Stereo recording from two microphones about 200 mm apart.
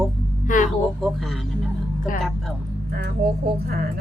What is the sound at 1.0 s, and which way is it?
Speech, centre (ahead or behind).